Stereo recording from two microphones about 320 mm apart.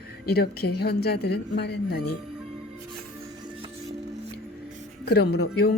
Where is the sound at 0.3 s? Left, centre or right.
Left.